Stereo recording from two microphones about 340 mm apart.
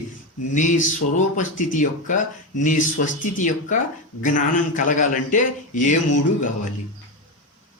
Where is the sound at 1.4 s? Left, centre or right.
Left.